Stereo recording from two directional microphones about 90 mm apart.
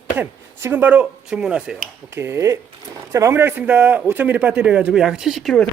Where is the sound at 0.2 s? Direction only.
20° right (ahead or behind).